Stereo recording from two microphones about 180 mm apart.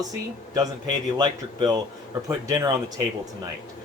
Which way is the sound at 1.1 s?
25° right (ahead or behind).